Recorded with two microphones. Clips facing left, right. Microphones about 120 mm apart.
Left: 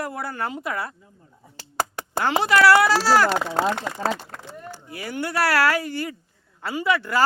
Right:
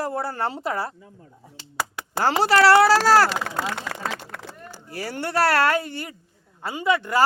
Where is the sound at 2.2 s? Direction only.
35° right (ahead or behind).